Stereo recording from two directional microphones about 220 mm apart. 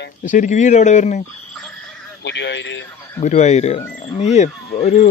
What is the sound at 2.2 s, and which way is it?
Speech, 50° left (ahead or behind).